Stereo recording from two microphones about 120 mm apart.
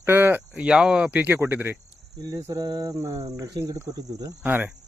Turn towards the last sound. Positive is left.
turn(degrees=-15)  # may be behind; listen again after turning